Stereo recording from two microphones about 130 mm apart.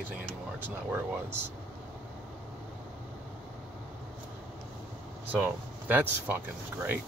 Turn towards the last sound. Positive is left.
turn(degrees=-15)  # may be behind; listen again after turning